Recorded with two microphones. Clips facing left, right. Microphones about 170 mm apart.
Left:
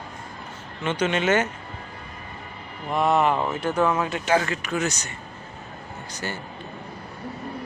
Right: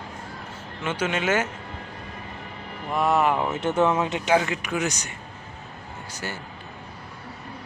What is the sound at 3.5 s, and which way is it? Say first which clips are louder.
Speech: right 1 dB; 25° right (ahead or behind).